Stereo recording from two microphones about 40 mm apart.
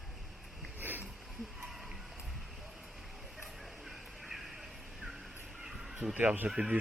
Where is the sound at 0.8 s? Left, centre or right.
Right.